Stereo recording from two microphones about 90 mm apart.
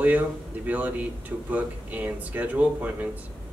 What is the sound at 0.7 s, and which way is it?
A man's voice, 20° right (ahead or behind).